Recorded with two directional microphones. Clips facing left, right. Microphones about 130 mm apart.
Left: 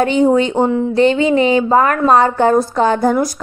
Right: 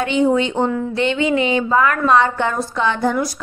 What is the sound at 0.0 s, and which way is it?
A woman's voice, 40° left (ahead or behind).